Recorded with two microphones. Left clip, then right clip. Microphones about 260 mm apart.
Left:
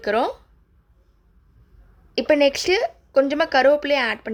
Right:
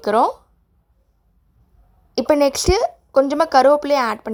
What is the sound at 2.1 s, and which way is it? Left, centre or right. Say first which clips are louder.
A woman's voice: right 1 dB; right.